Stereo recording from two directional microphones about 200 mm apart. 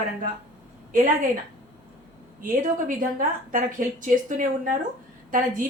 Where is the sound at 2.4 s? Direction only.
40° right (ahead or behind).